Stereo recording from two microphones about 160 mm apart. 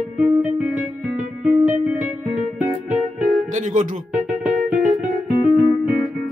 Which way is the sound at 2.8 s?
50° right (ahead or behind).